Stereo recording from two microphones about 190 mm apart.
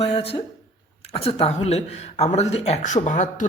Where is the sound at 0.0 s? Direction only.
30° left (ahead or behind).